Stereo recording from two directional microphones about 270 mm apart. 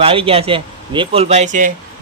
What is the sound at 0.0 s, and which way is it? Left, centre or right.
A man's voice, right.